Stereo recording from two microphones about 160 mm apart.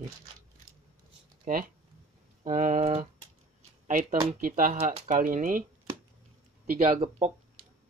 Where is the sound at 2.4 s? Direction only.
55° right (ahead or behind).